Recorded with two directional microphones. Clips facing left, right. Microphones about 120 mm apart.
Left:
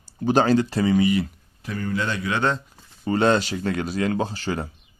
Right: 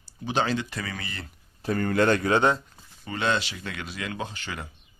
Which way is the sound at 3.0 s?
40° left (ahead or behind).